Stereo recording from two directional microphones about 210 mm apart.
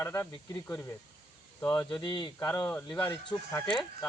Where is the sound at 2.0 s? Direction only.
20° left (ahead or behind).